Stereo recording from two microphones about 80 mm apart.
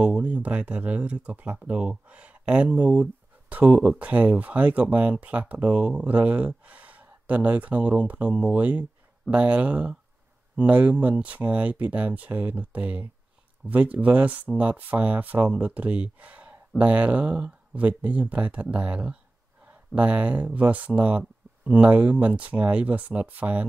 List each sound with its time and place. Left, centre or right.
0.0 s speech: centre